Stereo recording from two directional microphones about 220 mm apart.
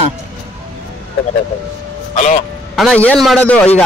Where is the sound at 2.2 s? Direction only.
35° left (ahead or behind).